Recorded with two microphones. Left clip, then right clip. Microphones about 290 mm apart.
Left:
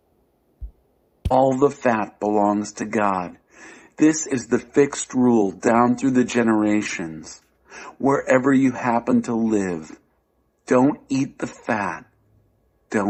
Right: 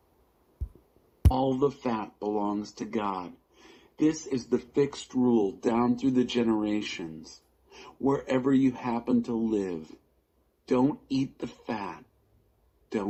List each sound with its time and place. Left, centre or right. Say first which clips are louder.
1.5 s speech: left 9 dB; left